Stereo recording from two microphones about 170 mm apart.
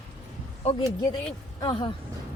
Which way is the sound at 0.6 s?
35° left (ahead or behind).